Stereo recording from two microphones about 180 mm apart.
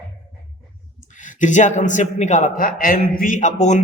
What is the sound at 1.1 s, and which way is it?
A man's voice, 45° left (ahead or behind).